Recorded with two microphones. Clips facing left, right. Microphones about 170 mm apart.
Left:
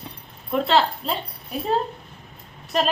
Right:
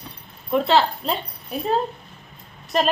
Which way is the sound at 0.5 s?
Centre (ahead or behind).